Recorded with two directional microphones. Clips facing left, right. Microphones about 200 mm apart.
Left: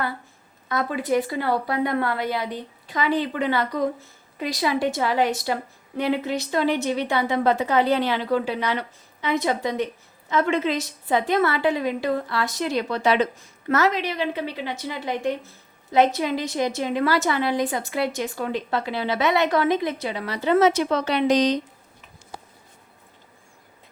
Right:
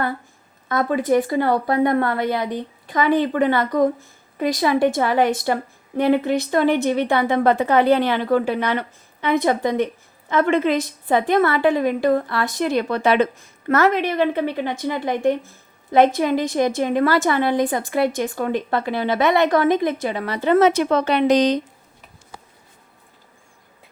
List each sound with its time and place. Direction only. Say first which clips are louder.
0.7 s a woman's voice: right 5 dB; 50° right (ahead or behind)